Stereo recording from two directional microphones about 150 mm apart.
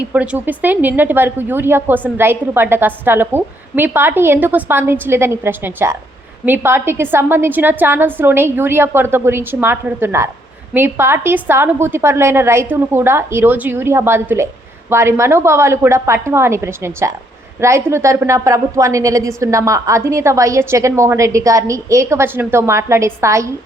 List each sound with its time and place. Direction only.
0.0 s a woman's voice: 10° right (ahead or behind)